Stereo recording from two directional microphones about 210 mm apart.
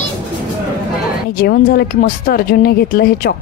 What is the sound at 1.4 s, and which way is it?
Speech, 50° left (ahead or behind).